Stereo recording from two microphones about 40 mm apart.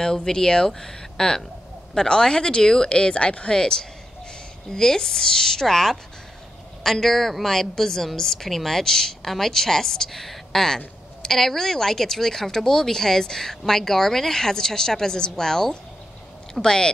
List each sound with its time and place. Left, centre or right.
0.0 s speech: centre